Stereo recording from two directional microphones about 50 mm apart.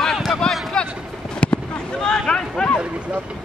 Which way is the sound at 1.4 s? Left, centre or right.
Left.